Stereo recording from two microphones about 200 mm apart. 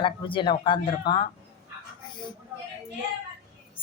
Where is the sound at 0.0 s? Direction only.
25° left (ahead or behind).